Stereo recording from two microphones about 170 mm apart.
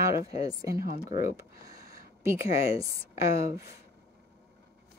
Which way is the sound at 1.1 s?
50° left (ahead or behind).